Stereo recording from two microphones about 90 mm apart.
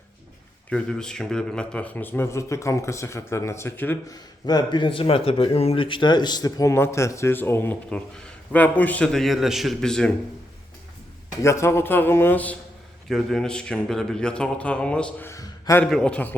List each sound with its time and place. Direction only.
0.7 s a man's voice: 10° left (ahead or behind); by 3.9 s 25° left (ahead or behind)
4.1 s speech: 45° left (ahead or behind)
6.7 s a man's voice: 30° left (ahead or behind)
7.9 s a man's voice: 15° left (ahead or behind)
9.1 s a man's voice: centre (ahead or behind)
11.4 s a man's voice: 30° left (ahead or behind)
13.1 s a man's voice: 5° left (ahead or behind)
15.4 s a sound: 40° left (ahead or behind)
15.9 s a man's voice: 10° left (ahead or behind)